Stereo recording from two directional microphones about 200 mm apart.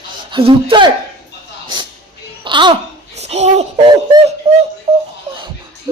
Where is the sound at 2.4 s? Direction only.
25° right (ahead or behind).